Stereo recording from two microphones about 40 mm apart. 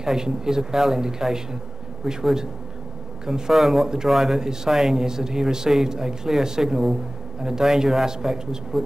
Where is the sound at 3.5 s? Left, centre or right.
Centre.